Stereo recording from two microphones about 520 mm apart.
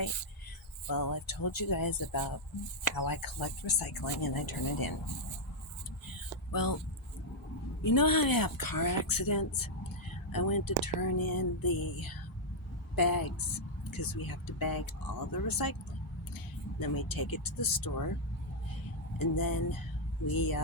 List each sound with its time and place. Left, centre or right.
0.9 s speech: left
6.5 s speech: left
7.8 s speech: left
16.8 s speech: left
17.6 s speech: left
19.2 s speech: left